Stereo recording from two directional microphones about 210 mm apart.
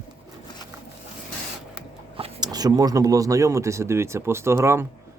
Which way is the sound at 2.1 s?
25° right (ahead or behind).